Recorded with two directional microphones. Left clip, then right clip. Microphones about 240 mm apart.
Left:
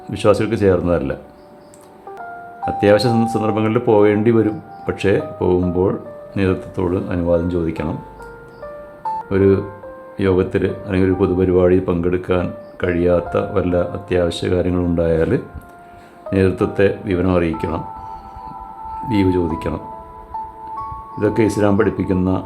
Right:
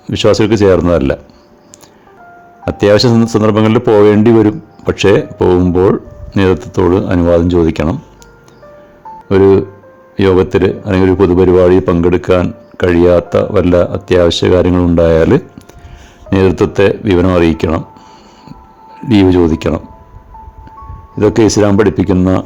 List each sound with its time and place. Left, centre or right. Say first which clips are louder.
0.1 s a man's voice: right 6 dB; right
2.6 s a man's voice: right 5 dB; right
9.3 s a man's voice: right 9 dB; right
19.0 s a man's voice: right 9 dB; right
21.2 s a man's voice: right 8 dB; right